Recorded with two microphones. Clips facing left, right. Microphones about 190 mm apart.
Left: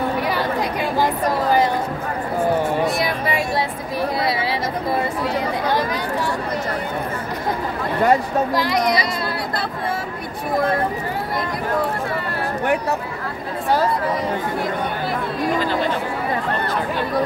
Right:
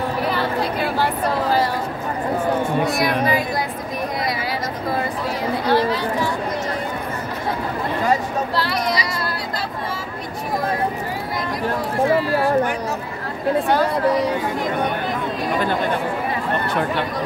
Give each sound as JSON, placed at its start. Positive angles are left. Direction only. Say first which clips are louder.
{"t": 0.3, "sound": "chatter", "louder": "even", "side_deg": 15}
{"t": 3.0, "sound": "music", "louder": "right 2 dB", "side_deg": 25}
{"t": 5.7, "sound": "chatter", "louder": "right 6 dB", "side_deg": 15}
{"t": 8.5, "sound": "speech", "louder": "left 2 dB", "side_deg": 15}